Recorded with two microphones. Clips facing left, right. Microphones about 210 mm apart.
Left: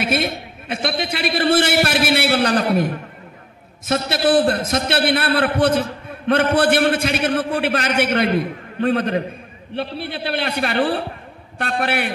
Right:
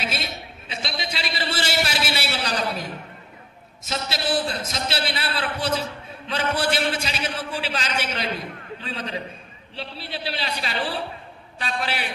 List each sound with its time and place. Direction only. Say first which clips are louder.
0.0 s a man's voice: left 10 dB; 55° left (ahead or behind)